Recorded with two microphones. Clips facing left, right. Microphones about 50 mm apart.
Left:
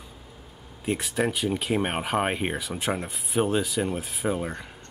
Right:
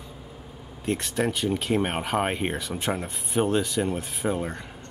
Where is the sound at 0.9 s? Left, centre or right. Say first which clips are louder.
Even; centre.